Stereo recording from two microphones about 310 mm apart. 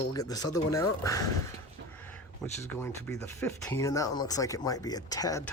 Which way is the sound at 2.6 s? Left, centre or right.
Centre.